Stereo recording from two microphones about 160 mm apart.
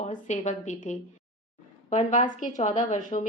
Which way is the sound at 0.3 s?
45° left (ahead or behind).